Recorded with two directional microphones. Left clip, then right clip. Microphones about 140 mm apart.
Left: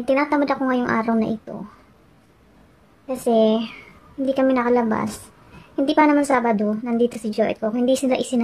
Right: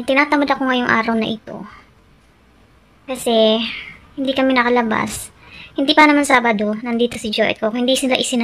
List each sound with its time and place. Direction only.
0.0 s a woman's voice: centre (ahead or behind)
3.1 s a woman's voice: 10° left (ahead or behind)